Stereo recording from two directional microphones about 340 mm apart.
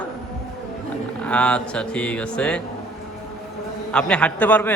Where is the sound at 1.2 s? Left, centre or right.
Centre.